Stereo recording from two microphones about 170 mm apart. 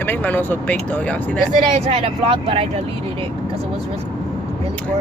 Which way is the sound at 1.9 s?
35° right (ahead or behind).